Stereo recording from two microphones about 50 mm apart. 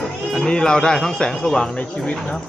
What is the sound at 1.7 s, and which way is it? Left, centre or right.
Speech, left.